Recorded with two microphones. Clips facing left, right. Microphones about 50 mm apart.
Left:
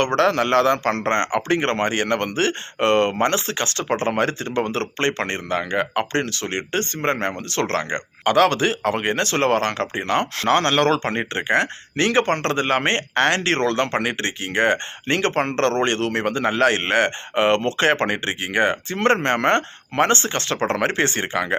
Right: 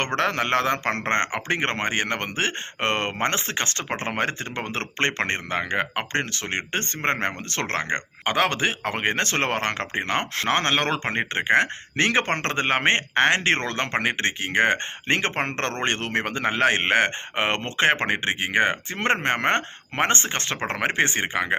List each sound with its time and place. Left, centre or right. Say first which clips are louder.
0.2 s a man's voice: left 5 dB; right
18.9 s a man's voice: left 5 dB; centre